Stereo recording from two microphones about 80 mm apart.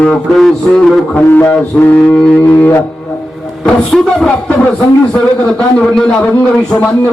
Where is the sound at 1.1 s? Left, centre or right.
Left.